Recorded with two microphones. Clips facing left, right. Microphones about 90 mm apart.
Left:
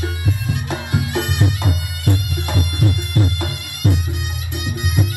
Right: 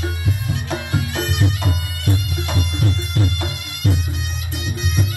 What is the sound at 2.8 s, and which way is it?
Music, 15° left (ahead or behind).